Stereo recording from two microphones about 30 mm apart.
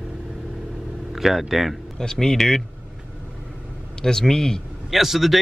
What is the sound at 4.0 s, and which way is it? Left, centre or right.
Speech, left.